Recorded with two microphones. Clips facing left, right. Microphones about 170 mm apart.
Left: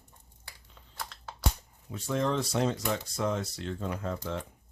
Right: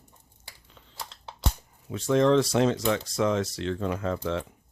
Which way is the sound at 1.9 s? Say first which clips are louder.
Right 9 dB; 90° right.